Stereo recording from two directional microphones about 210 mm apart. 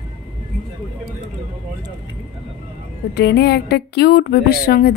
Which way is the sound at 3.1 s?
55° left (ahead or behind).